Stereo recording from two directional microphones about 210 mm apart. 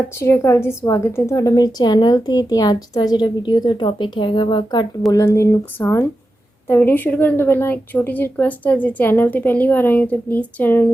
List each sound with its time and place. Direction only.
0.2 s a woman's voice: 10° left (ahead or behind)